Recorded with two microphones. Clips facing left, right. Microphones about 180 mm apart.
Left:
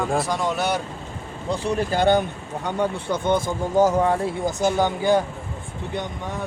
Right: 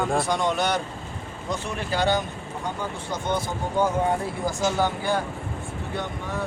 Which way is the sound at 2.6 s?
65° left (ahead or behind).